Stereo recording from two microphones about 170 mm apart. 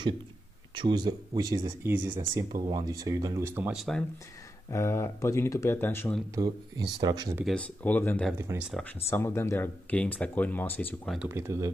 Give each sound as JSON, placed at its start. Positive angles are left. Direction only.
{"t": 0.7, "sound": "speech", "side_deg": -25}
{"t": 1.8, "sound": "speech", "side_deg": -10}
{"t": 4.6, "sound": "speech", "side_deg": 15}
{"t": 6.3, "sound": "speech", "side_deg": -25}
{"t": 7.5, "sound": "speech", "side_deg": 10}
{"t": 8.4, "sound": "speech", "side_deg": -15}
{"t": 8.8, "sound": "speech", "side_deg": 10}
{"t": 11.1, "sound": "speech", "side_deg": -15}